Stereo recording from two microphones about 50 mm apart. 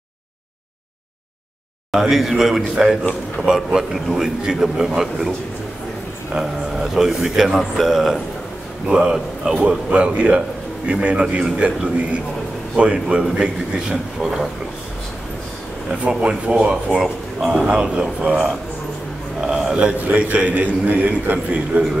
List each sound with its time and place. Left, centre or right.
1.9 s a man's voice: centre
6.3 s a man's voice: centre
16.0 s a man's voice: centre
17.4 s a man's voice: centre
17.6 s a man's voice: right
20.0 s a man's voice: right